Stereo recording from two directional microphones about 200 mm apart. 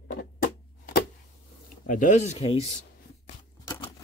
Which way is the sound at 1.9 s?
40° left (ahead or behind).